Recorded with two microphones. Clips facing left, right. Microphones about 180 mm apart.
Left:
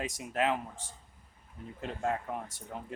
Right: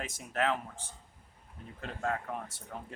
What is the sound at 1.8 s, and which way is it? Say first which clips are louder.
Speech: left 2 dB; 20° left (ahead or behind).